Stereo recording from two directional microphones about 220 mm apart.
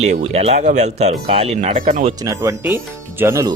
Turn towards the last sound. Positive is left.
turn(degrees=-10)  # may be behind; listen again after turning